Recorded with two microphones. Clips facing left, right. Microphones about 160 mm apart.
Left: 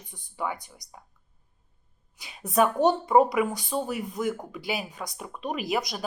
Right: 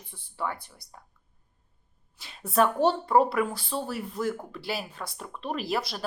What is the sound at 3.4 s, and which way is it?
Speech, 15° left (ahead or behind).